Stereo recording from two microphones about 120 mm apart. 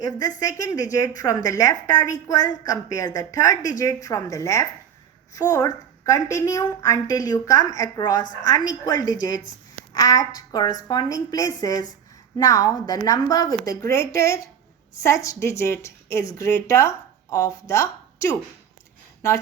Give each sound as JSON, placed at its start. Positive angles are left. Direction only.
{"t": 0.0, "sound": "a woman's voice", "side_deg": 30}